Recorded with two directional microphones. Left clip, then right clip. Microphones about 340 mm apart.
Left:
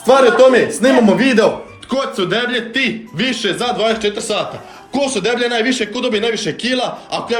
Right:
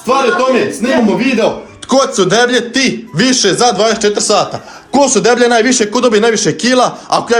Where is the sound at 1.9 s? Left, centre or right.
Centre.